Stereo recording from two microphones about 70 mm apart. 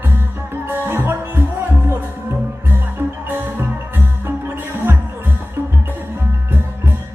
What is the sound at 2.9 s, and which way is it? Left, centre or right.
Music, right.